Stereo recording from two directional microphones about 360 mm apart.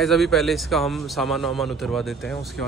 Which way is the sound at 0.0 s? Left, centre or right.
Centre.